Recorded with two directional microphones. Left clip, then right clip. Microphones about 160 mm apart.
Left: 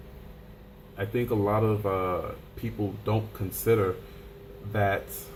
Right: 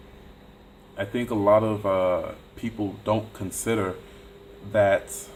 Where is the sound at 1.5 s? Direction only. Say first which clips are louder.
Right 11 dB; 50° right (ahead or behind).